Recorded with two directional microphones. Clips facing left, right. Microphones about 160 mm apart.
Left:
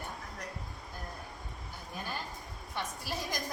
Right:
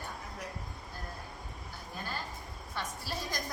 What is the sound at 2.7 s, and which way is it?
Speech, 15° left (ahead or behind).